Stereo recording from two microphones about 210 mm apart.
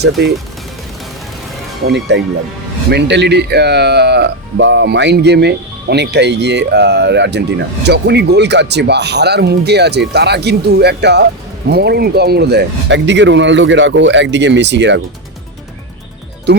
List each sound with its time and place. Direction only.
0.0 s speech: 50° right (ahead or behind)
1.8 s speech: 55° right (ahead or behind)
16.5 s speech: 55° right (ahead or behind)